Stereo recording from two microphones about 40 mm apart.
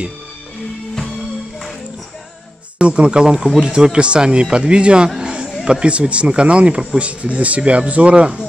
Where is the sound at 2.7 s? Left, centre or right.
Right.